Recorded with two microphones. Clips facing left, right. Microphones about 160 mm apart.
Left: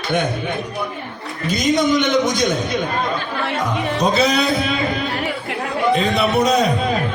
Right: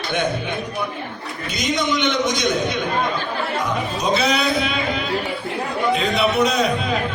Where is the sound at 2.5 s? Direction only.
Centre (ahead or behind).